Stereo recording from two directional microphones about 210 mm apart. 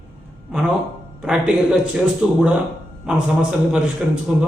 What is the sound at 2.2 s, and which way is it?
Speech, 5° right (ahead or behind).